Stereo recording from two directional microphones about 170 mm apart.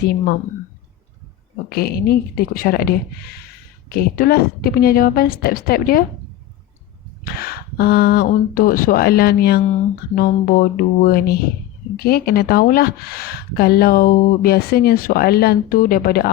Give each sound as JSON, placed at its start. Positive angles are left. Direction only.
{"t": 1.7, "sound": "speech", "side_deg": 65}
{"t": 7.3, "sound": "speech", "side_deg": 60}